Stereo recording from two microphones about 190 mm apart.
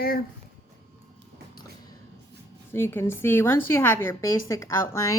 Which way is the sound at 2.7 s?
10° left (ahead or behind).